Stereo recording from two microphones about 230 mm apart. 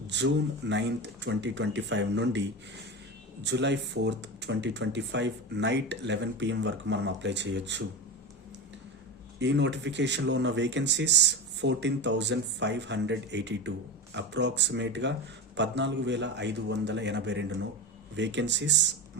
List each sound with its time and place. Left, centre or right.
0.1 s speech: right
9.4 s speech: right